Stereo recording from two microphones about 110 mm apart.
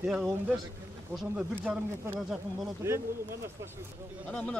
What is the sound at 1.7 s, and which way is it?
Speech, 5° right (ahead or behind).